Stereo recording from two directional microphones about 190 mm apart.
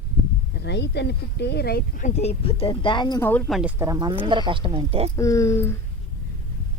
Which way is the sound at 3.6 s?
10° right (ahead or behind).